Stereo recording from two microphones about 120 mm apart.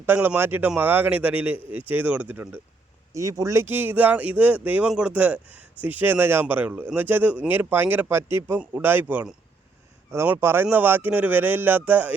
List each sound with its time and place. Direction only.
0.0 s speech: 15° right (ahead or behind)
3.1 s speech: 25° right (ahead or behind)
10.3 s speech: 20° right (ahead or behind)